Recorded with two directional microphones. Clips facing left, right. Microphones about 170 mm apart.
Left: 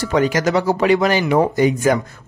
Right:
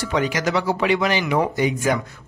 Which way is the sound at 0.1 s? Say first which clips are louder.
Left 5 dB; 45° left (ahead or behind).